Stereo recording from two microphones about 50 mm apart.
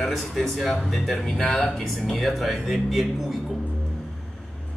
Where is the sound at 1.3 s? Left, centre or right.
Centre.